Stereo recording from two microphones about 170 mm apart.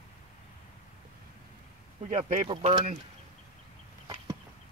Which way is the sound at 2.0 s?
45° right (ahead or behind).